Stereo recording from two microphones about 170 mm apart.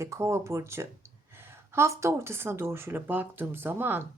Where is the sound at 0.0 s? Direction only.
15° right (ahead or behind).